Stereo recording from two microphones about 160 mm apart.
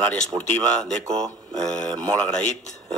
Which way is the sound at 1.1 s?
5° left (ahead or behind).